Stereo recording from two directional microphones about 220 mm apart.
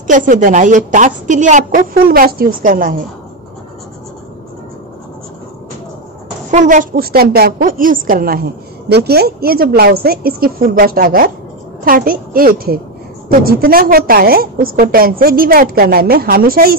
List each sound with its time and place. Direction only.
0.0 s a woman's voice: 35° right (ahead or behind)
6.5 s a woman's voice: 35° right (ahead or behind)